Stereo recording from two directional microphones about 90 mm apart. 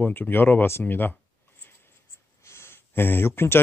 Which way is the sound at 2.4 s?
30° left (ahead or behind).